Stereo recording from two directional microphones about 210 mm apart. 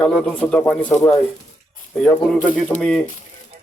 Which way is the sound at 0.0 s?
5° left (ahead or behind).